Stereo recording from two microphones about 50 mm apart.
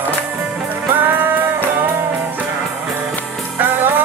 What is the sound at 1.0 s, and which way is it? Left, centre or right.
Music, right.